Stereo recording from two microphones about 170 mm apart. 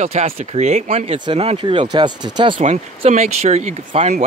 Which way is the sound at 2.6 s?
40° right (ahead or behind).